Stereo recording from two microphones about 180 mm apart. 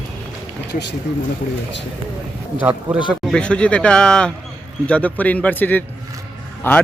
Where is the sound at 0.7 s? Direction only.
70° left (ahead or behind).